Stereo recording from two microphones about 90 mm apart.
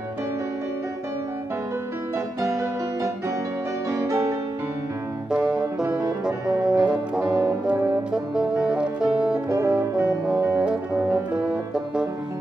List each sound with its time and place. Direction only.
2.4 s music: 35° right (ahead or behind)
5.3 s music: 10° right (ahead or behind)
9.5 s music: 30° right (ahead or behind)
9.8 s brass instrument: 10° right (ahead or behind)
11.3 s music: 10° right (ahead or behind)